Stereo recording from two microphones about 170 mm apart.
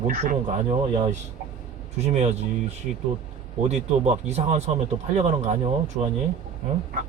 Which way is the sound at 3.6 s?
40° right (ahead or behind).